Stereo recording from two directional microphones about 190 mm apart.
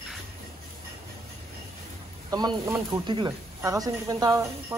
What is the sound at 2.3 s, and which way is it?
Speech, 20° right (ahead or behind).